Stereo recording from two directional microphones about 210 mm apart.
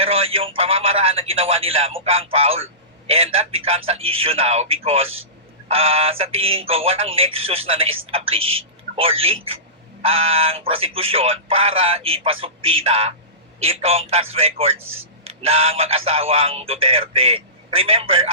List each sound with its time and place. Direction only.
0.0 s a man's voice: 30° right (ahead or behind)